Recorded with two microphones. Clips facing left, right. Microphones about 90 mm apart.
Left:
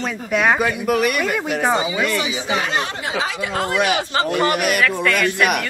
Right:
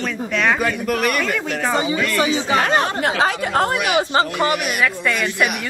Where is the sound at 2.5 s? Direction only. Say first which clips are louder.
Right 4 dB; 45° right (ahead or behind).